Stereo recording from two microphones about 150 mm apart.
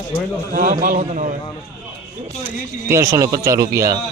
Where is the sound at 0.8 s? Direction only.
55° right (ahead or behind).